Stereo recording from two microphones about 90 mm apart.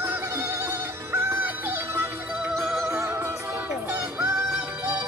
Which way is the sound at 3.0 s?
35° right (ahead or behind).